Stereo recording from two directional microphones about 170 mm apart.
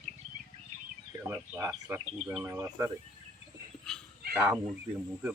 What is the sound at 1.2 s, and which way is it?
Speech, 15° right (ahead or behind).